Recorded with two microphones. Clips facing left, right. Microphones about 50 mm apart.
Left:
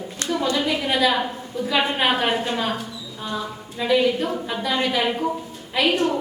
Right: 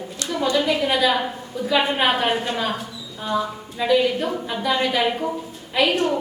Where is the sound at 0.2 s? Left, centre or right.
Left.